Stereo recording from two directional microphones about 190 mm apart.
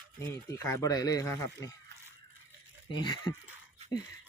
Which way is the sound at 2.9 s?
25° left (ahead or behind).